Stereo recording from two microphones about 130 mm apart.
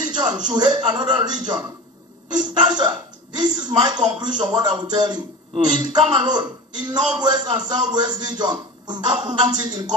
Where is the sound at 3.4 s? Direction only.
35° right (ahead or behind).